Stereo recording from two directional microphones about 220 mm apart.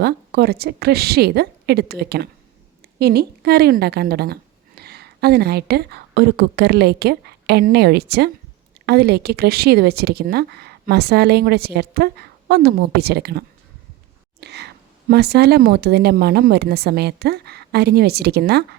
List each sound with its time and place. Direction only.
0.0 s a woman's voice: 45° right (ahead or behind)
14.4 s speech: 50° right (ahead or behind)